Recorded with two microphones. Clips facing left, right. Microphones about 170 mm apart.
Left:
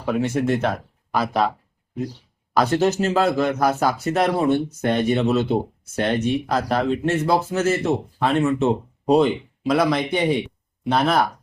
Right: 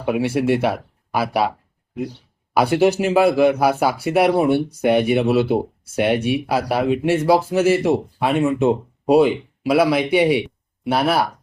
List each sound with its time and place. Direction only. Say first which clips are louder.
0.0 s speech: right 2 dB; 10° right (ahead or behind)
2.6 s speech: right 3 dB; 10° right (ahead or behind)